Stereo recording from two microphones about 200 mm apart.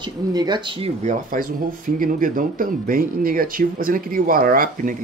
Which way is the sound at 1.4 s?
45° right (ahead or behind).